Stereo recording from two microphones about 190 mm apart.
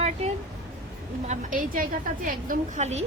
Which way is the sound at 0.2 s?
35° right (ahead or behind).